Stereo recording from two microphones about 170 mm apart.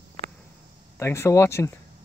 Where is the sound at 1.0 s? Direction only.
15° left (ahead or behind).